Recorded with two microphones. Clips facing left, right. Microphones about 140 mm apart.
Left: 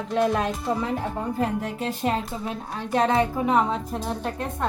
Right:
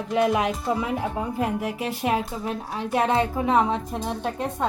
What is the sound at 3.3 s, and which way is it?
Speech, 15° right (ahead or behind).